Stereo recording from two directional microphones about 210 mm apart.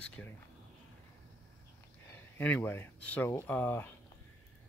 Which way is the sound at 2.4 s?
10° left (ahead or behind).